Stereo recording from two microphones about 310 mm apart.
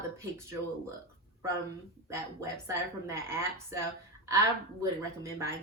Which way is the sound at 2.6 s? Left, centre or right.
Centre.